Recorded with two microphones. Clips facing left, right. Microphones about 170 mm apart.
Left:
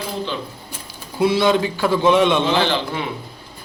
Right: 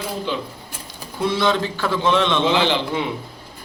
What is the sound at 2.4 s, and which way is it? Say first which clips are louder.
Speech: even; 15° right (ahead or behind).